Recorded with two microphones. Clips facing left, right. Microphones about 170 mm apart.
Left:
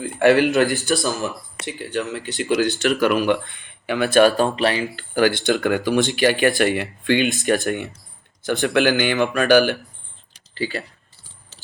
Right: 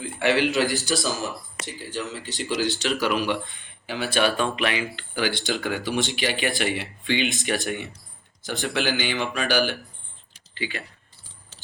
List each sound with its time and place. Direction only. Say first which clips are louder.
0.0 s speech: left 7 dB; 50° left (ahead or behind)
10.5 s speech: left 6 dB; 40° left (ahead or behind)